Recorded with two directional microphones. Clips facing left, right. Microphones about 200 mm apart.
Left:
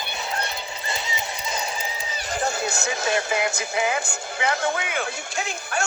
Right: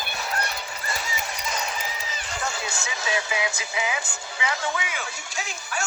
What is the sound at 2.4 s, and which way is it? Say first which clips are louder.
Speech: left 6 dB; 40° left (ahead or behind).